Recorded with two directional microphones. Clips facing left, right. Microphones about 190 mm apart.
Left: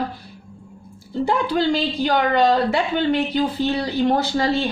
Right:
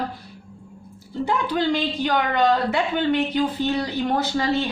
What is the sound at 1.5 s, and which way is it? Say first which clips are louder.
Speech: left 2 dB; 35° left (ahead or behind).